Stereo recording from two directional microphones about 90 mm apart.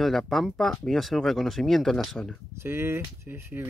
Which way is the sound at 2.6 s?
25° right (ahead or behind).